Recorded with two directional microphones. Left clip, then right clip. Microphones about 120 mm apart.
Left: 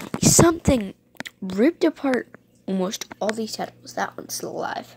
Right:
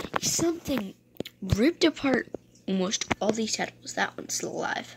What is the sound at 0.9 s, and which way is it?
Speech, 55° left (ahead or behind).